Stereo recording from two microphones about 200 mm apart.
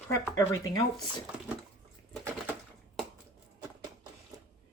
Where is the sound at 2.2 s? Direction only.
10° right (ahead or behind).